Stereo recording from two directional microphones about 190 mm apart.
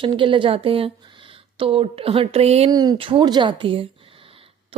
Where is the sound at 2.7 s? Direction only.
20° right (ahead or behind).